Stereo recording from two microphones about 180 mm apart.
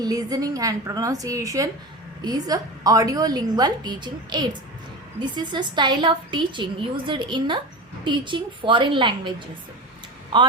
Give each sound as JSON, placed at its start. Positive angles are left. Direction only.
{"t": 0.0, "sound": "a woman's voice", "side_deg": -20}